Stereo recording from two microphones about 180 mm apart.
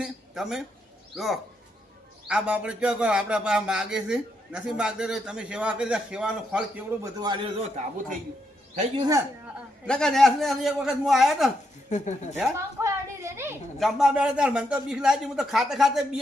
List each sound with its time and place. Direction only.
0.0 s a man's voice: centre (ahead or behind)
7.0 s a man's voice: 20° right (ahead or behind)
9.0 s a man's voice: 20° right (ahead or behind)
9.8 s a man's voice: 5° left (ahead or behind)
11.9 s speech: 40° left (ahead or behind)
12.4 s a woman's voice: 15° right (ahead or behind)
13.7 s a man's voice: centre (ahead or behind)